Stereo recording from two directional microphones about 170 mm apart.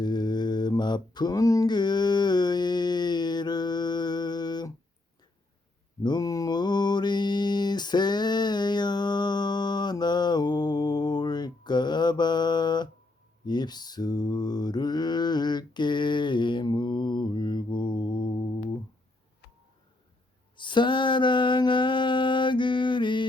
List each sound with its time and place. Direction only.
0.0 s mantra: 25° left (ahead or behind)
6.0 s mantra: 25° left (ahead or behind)
20.6 s a sound: 25° left (ahead or behind)